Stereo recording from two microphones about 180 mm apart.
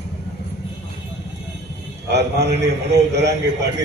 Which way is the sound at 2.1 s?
70° right (ahead or behind).